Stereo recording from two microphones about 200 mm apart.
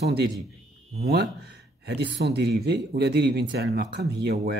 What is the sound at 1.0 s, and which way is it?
Speech, 55° right (ahead or behind).